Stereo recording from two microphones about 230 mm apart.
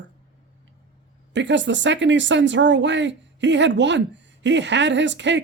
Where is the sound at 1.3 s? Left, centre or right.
Right.